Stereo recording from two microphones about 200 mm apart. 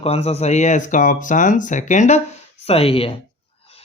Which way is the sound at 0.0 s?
30° left (ahead or behind).